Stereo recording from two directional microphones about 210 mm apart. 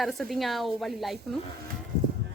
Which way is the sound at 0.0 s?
Centre (ahead or behind).